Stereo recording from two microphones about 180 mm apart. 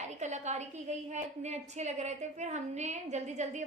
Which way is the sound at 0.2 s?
40° right (ahead or behind).